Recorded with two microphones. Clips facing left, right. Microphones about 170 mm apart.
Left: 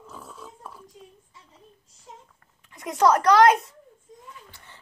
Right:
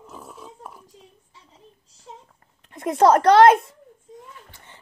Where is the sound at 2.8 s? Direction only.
30° right (ahead or behind).